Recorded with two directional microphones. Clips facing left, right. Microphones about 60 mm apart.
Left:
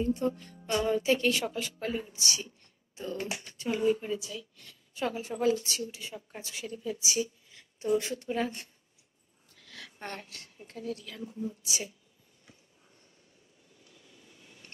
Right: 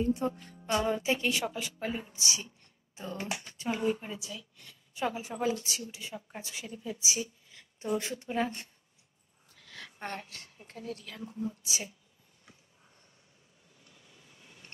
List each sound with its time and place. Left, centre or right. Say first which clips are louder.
0.1 s a woman's voice: left 1 dB; centre
4.6 s a woman's voice: right 1 dB; centre
9.6 s a sound: right 2 dB; right
11.0 s speech: left 2 dB; right
11.3 s speech: even; right
14.3 s a sound: right 1 dB; right